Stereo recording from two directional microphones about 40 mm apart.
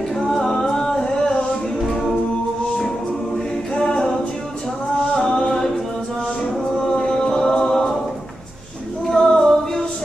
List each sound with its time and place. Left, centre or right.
0.2 s singing: centre
1.9 s singing: centre
3.7 s a capella: centre
5.1 s singing: centre
6.8 s a capella: centre
9.0 s a capella: centre